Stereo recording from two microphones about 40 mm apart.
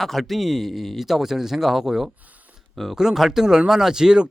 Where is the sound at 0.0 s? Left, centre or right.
Centre.